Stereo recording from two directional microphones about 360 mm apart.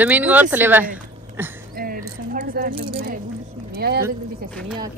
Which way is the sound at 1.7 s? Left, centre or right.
Right.